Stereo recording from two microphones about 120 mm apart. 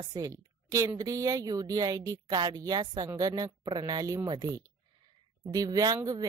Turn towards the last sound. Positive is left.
turn(degrees=-30)  # may be behind; listen again after turning